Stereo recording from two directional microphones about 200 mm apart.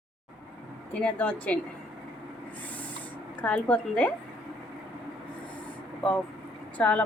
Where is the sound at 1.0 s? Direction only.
5° left (ahead or behind).